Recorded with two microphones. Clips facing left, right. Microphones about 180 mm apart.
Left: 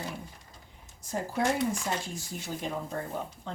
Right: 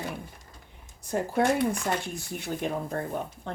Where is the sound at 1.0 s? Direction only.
60° right (ahead or behind).